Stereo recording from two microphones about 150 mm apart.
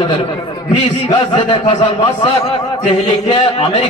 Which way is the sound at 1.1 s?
30° left (ahead or behind).